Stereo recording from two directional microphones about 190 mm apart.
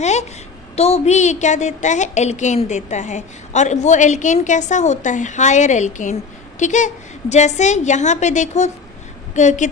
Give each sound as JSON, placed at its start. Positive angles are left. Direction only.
{"t": 0.7, "sound": "a woman's voice", "side_deg": 35}